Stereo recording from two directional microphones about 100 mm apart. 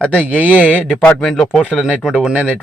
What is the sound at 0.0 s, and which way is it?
Speech, 10° left (ahead or behind).